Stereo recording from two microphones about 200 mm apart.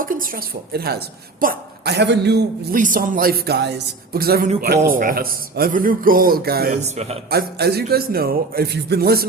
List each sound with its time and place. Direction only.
0.0 s a woman's voice: 45° right (ahead or behind)
2.7 s a woman's voice: 40° right (ahead or behind)
6.8 s a man's voice: 35° right (ahead or behind)
7.3 s a woman's voice: 50° right (ahead or behind)